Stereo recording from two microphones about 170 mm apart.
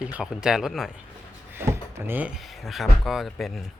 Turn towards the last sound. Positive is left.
turn(degrees=0)  # may be behind; listen again after turning